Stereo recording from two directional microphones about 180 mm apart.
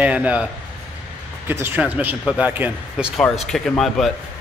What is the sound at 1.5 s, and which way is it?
Speech, 10° right (ahead or behind).